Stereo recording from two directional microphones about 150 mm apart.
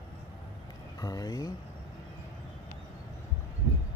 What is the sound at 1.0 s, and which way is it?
Speech, 25° left (ahead or behind).